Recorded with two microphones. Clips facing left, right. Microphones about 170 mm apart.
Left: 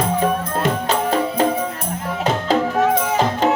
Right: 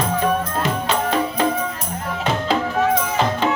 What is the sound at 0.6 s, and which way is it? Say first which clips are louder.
Music: left 2 dB; 40° left (ahead or behind).